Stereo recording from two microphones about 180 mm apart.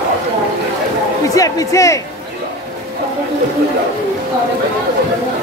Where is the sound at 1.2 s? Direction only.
20° left (ahead or behind).